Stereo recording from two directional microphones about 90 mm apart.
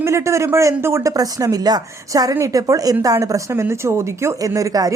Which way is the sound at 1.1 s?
45° right (ahead or behind).